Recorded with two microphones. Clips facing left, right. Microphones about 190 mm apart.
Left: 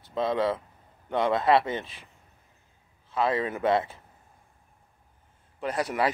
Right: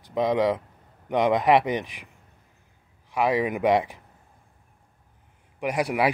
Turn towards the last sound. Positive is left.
turn(degrees=-10)  # may be behind; listen again after turning